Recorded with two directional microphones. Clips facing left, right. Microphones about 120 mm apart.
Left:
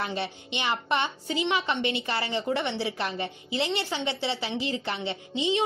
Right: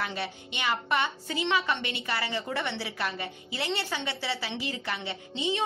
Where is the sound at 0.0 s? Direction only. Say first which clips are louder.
Left 2 dB; 25° left (ahead or behind).